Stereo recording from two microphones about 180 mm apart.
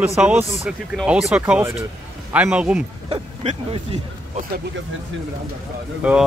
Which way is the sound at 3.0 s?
30° right (ahead or behind).